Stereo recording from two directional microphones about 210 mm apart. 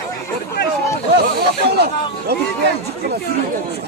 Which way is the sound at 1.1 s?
50° right (ahead or behind).